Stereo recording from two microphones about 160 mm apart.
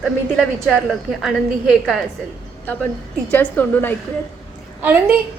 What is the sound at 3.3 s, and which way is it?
Speech, 10° left (ahead or behind).